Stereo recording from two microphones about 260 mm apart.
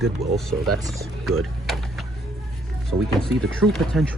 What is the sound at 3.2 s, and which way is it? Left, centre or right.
Speech, centre.